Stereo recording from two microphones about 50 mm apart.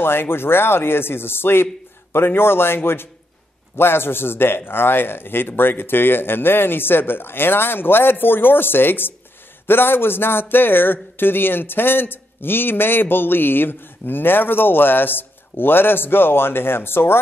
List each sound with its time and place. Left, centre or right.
0.0 s speech: left